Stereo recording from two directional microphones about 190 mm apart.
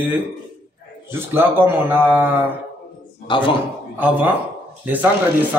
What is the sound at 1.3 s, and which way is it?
Speech, 10° right (ahead or behind).